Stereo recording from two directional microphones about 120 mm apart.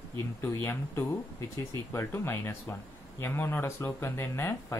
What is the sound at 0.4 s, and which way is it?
Speech, 20° left (ahead or behind).